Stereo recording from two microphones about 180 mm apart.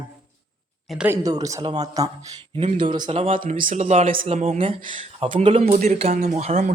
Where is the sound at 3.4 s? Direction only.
50° right (ahead or behind).